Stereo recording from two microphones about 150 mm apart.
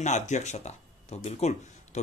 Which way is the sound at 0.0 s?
50° left (ahead or behind).